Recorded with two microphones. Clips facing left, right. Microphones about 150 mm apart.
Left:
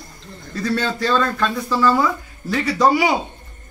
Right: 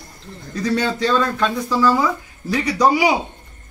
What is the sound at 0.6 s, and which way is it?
A man's voice, 15° right (ahead or behind).